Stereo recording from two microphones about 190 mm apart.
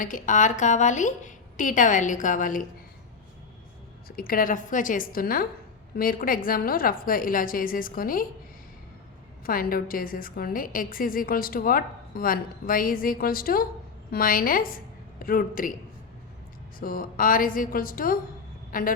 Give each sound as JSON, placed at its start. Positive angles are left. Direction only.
{"t": 0.0, "sound": "a woman's voice", "side_deg": 45}
{"t": 4.1, "sound": "a woman's voice", "side_deg": 50}
{"t": 9.5, "sound": "a woman's voice", "side_deg": 50}
{"t": 16.8, "sound": "a woman's voice", "side_deg": 50}
{"t": 18.7, "sound": "a sound", "side_deg": 45}